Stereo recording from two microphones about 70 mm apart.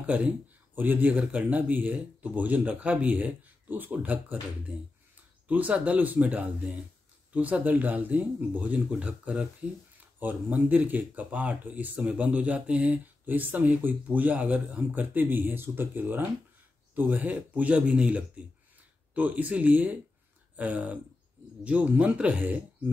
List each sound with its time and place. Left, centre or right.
0.0 s speech: centre
5.5 s speech: right